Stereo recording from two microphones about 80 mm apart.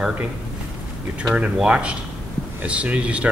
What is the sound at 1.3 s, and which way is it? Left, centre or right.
A man's voice, centre.